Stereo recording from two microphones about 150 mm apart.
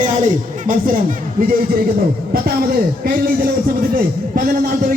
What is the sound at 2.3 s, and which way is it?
Speech, 80° right.